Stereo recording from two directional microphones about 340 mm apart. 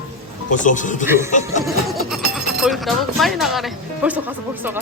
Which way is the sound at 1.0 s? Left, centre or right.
Centre.